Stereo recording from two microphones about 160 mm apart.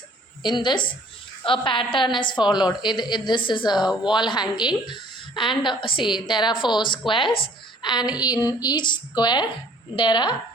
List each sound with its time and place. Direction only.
0.4 s a woman's voice: 30° left (ahead or behind)